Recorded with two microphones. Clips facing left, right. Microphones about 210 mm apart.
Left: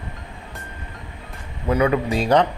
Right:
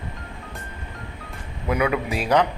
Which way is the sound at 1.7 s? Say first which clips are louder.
Left 3 dB; 35° left (ahead or behind).